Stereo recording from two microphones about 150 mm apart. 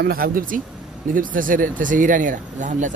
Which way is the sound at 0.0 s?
80° right.